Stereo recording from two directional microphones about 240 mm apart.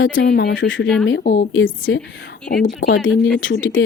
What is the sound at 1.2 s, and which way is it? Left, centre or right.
Speech, left.